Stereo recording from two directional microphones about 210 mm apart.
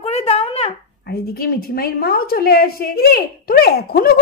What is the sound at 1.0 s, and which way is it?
A woman's voice, 45° left (ahead or behind).